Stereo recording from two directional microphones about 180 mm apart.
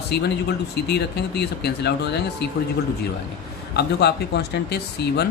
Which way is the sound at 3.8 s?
65° left (ahead or behind).